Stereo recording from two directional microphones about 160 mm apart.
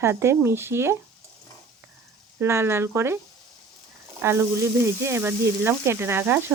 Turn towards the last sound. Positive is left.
turn(degrees=-15)  # may be behind; listen again after turning